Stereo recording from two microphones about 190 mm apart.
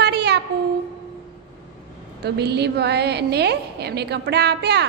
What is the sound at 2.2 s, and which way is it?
A woman's voice, 60° right (ahead or behind).